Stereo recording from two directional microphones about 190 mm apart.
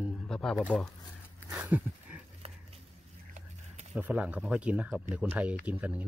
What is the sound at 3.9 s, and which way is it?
Speech, 10° right (ahead or behind).